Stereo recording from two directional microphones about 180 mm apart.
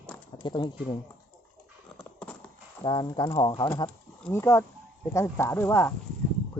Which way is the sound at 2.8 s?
25° left (ahead or behind).